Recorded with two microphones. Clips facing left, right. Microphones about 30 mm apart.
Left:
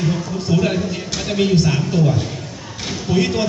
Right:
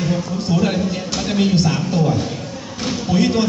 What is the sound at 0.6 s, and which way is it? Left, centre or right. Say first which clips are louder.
Speech: right 1 dB; right.